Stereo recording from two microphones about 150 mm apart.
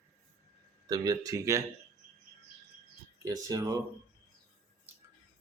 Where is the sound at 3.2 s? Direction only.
25° right (ahead or behind).